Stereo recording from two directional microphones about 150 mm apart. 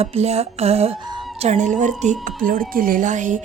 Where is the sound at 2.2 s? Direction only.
70° right (ahead or behind).